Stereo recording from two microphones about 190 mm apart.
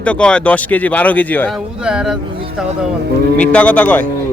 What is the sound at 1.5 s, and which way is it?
Speech, 5° right (ahead or behind).